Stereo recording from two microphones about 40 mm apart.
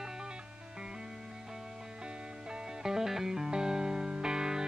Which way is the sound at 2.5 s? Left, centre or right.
Centre.